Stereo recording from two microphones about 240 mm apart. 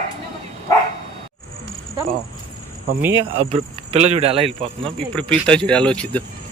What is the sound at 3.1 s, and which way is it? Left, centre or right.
Speech, right.